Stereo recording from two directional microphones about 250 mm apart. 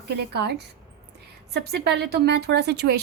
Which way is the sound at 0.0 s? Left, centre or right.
Right.